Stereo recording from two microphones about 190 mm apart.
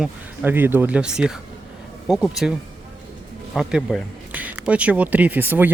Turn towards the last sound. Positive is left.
turn(degrees=-10)  # may be behind; listen again after turning